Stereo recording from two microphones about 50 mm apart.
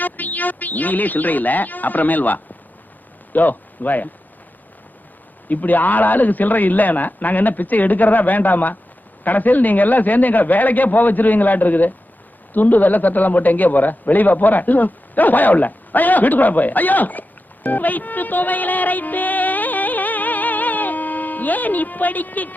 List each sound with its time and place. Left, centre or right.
0.0 s speech: left
5.5 s a man's voice: left